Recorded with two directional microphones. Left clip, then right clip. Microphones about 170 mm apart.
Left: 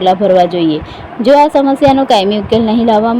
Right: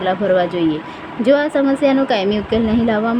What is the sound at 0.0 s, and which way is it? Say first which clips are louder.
A woman's voice: left 7 dB; 20° left (ahead or behind).